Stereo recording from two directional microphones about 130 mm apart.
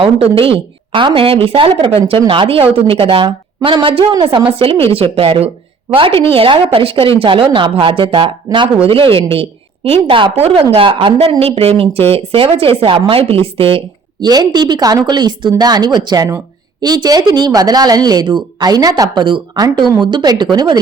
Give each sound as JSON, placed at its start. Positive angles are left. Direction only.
{"t": 0.0, "sound": "a woman's voice", "side_deg": -45}
{"t": 14.3, "sound": "speech", "side_deg": -35}